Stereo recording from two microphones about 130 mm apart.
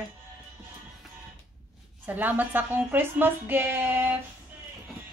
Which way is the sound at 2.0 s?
15° right (ahead or behind).